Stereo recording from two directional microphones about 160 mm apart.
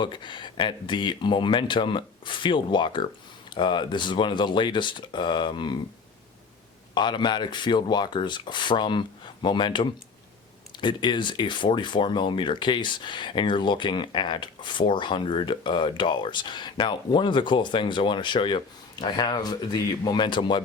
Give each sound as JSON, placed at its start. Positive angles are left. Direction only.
{"t": 0.0, "sound": "speech", "side_deg": 30}
{"t": 6.9, "sound": "speech", "side_deg": 30}